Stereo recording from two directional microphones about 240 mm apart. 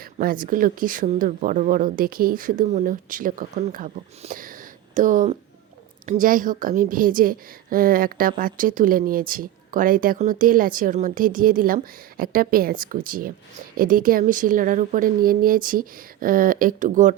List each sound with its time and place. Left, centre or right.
0.0 s a woman's voice: right